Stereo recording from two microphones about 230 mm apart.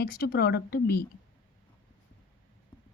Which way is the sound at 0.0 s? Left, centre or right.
Left.